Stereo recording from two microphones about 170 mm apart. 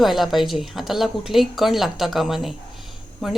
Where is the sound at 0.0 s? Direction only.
Centre (ahead or behind).